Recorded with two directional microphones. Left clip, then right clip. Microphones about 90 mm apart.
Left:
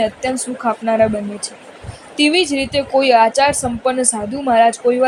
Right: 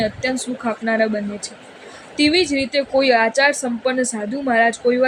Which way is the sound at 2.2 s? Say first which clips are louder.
Left 2 dB; 40° left (ahead or behind).